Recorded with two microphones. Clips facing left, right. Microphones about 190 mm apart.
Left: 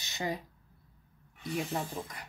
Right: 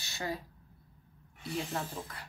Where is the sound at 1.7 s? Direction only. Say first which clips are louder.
Left 2 dB; 15° left (ahead or behind).